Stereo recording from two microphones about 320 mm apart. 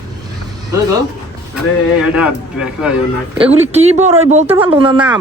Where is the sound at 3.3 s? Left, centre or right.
Centre.